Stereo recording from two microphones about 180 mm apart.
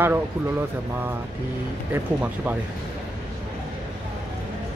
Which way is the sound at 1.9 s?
10° right (ahead or behind).